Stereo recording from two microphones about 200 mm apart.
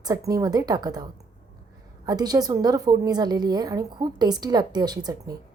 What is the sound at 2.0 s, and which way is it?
A woman's voice, 20° right (ahead or behind).